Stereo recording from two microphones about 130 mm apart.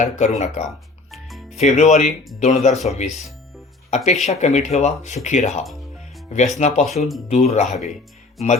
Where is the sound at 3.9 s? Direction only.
65° left (ahead or behind).